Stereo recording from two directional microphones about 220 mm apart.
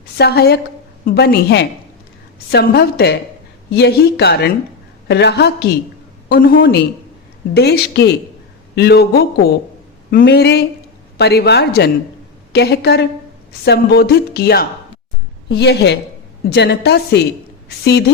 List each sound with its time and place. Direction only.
0.2 s speech: 45° left (ahead or behind)